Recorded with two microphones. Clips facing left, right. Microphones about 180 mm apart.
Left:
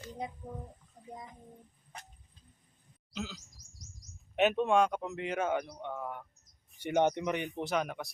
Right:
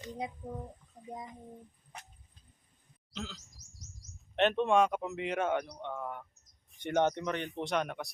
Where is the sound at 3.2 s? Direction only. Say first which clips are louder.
Left 2 dB; 10° left (ahead or behind).